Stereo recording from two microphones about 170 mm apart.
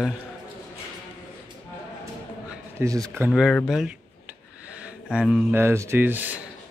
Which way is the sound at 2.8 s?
20° right (ahead or behind).